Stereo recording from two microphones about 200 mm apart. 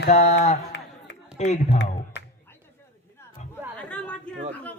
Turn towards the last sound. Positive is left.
turn(degrees=5)  # may be behind; listen again after turning